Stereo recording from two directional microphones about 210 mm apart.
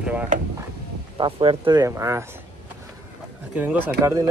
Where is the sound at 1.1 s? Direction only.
25° right (ahead or behind).